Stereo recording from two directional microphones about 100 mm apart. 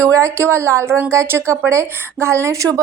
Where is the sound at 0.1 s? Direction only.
30° right (ahead or behind).